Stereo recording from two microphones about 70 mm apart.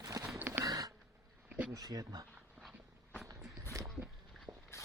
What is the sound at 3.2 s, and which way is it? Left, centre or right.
Walk, right.